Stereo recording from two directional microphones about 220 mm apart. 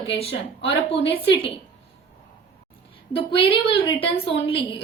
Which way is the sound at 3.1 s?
25° left (ahead or behind).